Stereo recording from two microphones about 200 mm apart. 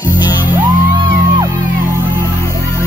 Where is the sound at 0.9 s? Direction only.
25° right (ahead or behind).